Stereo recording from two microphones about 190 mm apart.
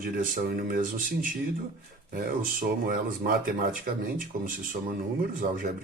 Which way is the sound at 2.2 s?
45° right (ahead or behind).